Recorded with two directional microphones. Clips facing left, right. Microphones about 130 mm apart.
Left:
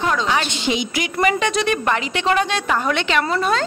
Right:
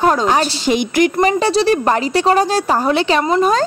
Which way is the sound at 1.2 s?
35° right (ahead or behind).